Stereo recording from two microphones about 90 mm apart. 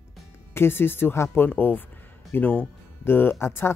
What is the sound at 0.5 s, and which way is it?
Speech, 25° left (ahead or behind).